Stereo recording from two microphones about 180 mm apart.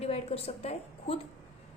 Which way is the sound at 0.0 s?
35° left (ahead or behind).